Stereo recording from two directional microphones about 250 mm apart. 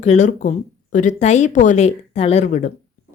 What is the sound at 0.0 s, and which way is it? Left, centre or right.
Speech, left.